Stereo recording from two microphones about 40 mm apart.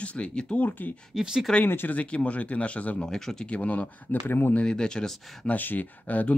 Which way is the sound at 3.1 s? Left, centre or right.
Centre.